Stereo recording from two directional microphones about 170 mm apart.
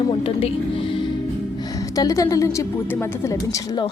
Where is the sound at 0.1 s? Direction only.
30° left (ahead or behind).